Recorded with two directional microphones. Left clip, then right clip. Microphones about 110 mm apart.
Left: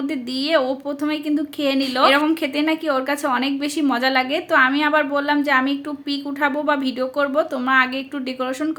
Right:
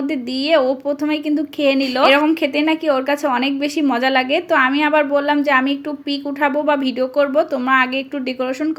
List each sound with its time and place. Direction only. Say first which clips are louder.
0.1 s a woman's voice: right 4 dB; 25° right (ahead or behind)